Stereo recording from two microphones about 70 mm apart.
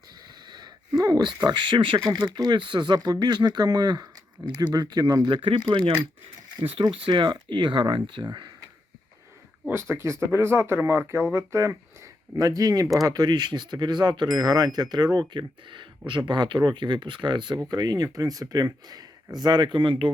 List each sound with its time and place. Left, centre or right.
0.4 s wheeze: right
1.0 s speech: right
9.9 s speech: right
12.4 s speech: right
17.7 s speech: right